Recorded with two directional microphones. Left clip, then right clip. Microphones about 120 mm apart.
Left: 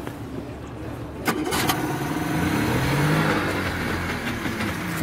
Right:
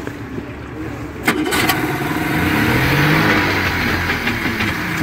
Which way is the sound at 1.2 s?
20° right (ahead or behind).